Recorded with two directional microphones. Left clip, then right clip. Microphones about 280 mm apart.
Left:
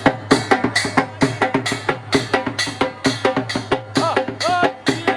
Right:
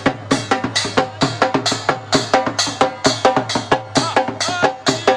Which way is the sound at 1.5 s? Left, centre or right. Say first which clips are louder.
Right 3 dB; centre.